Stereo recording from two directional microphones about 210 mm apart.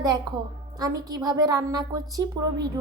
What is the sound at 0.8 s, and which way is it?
A woman's voice, 20° right (ahead or behind).